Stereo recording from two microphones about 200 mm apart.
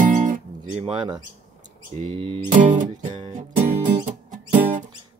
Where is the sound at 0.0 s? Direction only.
40° right (ahead or behind).